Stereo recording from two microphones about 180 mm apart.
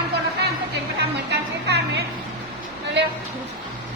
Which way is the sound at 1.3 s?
65° right (ahead or behind).